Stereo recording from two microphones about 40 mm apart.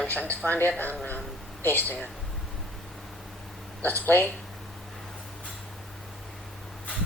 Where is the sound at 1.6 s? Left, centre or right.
Left.